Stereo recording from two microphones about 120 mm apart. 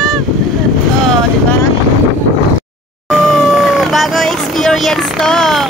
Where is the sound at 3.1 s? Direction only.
Centre (ahead or behind).